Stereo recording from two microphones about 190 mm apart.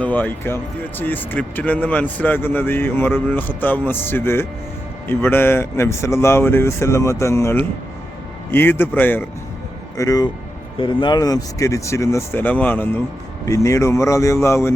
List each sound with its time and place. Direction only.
0.0 s speech: 10° left (ahead or behind)